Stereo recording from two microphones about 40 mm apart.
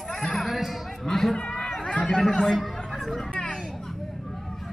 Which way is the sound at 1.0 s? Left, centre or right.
Centre.